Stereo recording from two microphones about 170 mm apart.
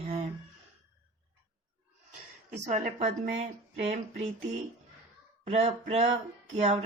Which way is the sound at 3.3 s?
40° right (ahead or behind).